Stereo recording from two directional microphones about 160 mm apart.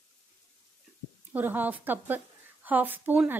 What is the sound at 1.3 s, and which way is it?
A woman's voice, 10° right (ahead or behind).